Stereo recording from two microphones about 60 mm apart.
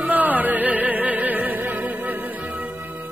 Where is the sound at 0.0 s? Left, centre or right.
Right.